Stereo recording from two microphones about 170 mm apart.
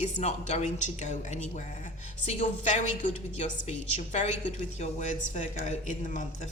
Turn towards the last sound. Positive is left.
turn(degrees=45)  # may be behind; listen again after turning